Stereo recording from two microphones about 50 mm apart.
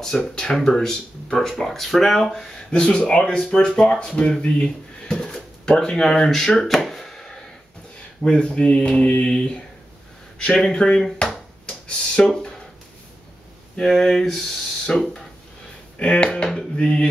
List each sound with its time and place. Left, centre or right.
0.0 s speech: centre
5.1 s a sound: centre
8.3 s mantra: left
9.2 s speech: centre
13.7 s speech: centre
16.0 s mantra: left